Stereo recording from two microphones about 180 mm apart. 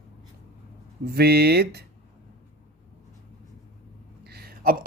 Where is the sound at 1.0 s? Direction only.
65° right (ahead or behind).